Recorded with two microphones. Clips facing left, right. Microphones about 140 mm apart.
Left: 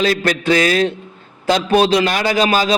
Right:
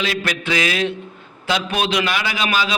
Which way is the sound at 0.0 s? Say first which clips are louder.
Left 7 dB; 40° left (ahead or behind).